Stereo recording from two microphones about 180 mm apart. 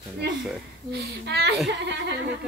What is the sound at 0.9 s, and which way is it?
Speech, 65° right (ahead or behind).